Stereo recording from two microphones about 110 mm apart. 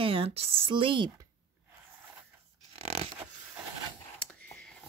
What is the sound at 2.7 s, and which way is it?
Zipper, 70° right (ahead or behind).